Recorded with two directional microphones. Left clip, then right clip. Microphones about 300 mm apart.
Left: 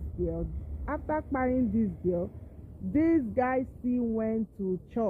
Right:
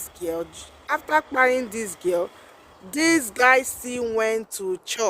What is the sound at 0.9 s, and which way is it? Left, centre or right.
Speech, centre.